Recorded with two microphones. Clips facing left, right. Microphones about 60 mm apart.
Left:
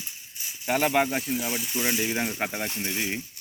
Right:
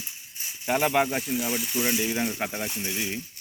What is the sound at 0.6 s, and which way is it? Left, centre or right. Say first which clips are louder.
Speech: even; centre.